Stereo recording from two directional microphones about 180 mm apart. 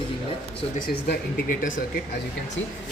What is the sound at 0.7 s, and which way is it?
Speech, 55° left (ahead or behind).